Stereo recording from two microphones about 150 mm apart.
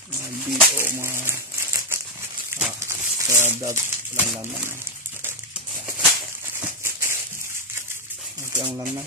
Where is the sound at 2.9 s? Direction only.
20° right (ahead or behind).